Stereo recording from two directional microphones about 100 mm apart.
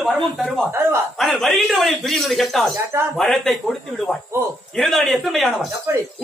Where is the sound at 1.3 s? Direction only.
Centre (ahead or behind).